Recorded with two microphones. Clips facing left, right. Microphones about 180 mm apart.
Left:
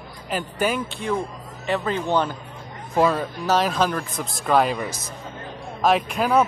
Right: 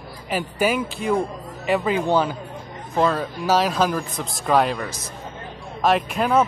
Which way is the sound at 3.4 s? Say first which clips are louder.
Right 2 dB; 5° right (ahead or behind).